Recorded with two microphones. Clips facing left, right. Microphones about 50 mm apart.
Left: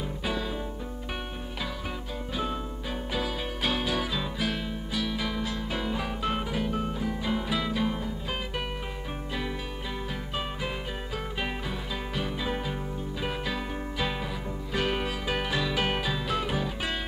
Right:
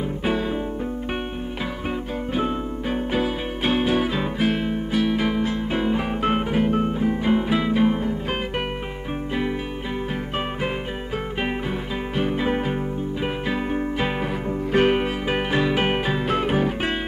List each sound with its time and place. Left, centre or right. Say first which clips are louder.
0.2 s music: right 8 dB; right
2.3 s music: right 7 dB; right
12.2 s music: right 10 dB; right